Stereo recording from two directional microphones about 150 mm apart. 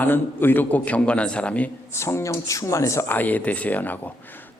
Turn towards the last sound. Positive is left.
turn(degrees=10)  # may be behind; listen again after turning